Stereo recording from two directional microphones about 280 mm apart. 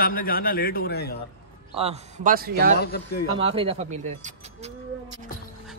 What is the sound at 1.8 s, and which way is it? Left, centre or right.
Speech, right.